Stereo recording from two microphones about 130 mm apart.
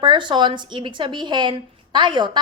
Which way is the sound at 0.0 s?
35° right (ahead or behind).